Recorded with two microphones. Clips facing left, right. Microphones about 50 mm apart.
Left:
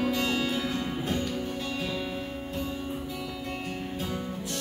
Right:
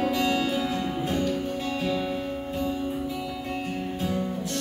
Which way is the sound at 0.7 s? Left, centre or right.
Right.